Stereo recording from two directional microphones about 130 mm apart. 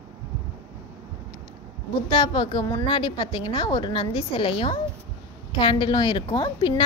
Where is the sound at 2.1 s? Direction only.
35° left (ahead or behind).